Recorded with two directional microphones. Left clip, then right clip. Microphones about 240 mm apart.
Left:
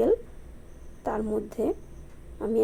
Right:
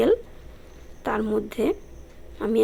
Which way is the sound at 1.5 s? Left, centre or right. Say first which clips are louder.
Right 3 dB; centre.